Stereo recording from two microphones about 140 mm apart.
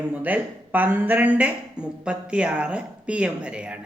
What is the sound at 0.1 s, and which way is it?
Speech, 10° right (ahead or behind).